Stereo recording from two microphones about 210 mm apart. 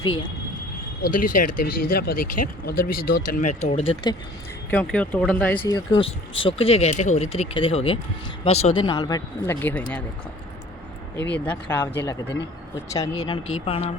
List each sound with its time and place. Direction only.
0.0 s speech: 25° left (ahead or behind)
1.0 s speech: 40° left (ahead or behind)
4.7 s speech: 5° left (ahead or behind)
5.6 s speech: 20° left (ahead or behind)
8.9 s speech: 20° left (ahead or behind)
11.3 s speech: 5° left (ahead or behind); by 13.8 s 25° left (ahead or behind)